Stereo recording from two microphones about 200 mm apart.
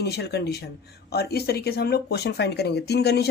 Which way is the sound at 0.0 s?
55° left (ahead or behind).